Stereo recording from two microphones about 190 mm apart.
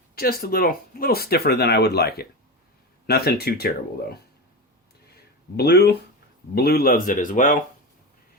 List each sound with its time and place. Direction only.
0.2 s speech: 50° left (ahead or behind)
5.5 s speech: 60° left (ahead or behind)